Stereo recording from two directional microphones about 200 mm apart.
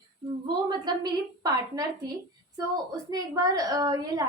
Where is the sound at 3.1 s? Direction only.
20° right (ahead or behind).